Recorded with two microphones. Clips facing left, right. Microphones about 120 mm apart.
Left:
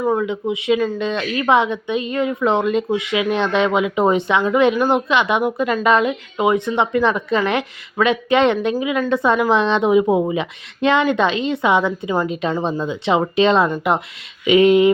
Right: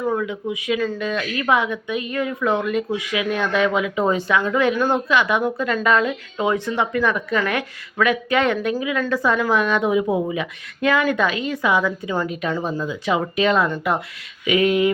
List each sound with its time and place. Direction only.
0.1 s speech: 25° left (ahead or behind)